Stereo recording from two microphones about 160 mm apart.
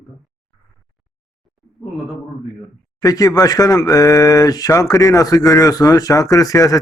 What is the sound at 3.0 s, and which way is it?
Speech, 25° left (ahead or behind).